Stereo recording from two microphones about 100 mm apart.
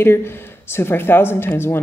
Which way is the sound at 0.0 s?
25° left (ahead or behind).